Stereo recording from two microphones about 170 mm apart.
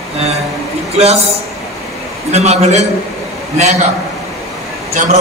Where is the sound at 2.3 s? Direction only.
40° right (ahead or behind).